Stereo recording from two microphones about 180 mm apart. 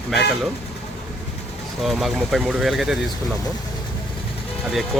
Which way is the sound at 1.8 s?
Centre (ahead or behind).